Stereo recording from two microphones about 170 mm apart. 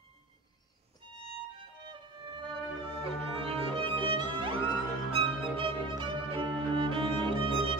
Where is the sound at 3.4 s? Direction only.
35° right (ahead or behind).